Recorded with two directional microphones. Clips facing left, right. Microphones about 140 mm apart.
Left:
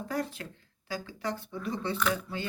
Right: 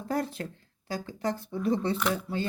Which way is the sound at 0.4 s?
35° right (ahead or behind).